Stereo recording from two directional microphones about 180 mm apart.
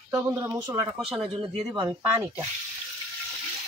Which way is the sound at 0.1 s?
15° right (ahead or behind).